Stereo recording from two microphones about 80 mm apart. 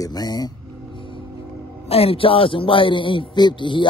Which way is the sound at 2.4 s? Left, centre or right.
Left.